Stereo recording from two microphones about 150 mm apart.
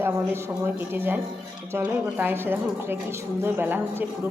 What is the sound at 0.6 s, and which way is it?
A woman's voice, 15° right (ahead or behind).